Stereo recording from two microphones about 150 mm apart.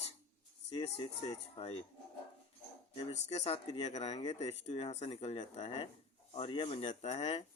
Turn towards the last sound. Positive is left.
turn(degrees=45)  # may be behind; listen again after turning